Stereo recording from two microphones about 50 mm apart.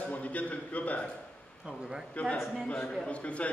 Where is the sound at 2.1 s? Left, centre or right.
Left.